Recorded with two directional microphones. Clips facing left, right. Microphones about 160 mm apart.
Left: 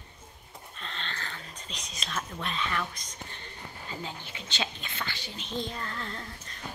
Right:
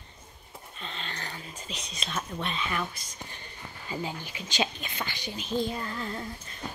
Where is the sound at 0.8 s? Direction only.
5° right (ahead or behind).